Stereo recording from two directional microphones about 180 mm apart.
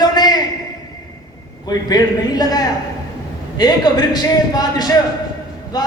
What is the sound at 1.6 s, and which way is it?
A man's voice, 20° left (ahead or behind).